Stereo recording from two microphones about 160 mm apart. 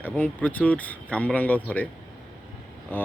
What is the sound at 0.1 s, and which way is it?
Speech, 10° left (ahead or behind).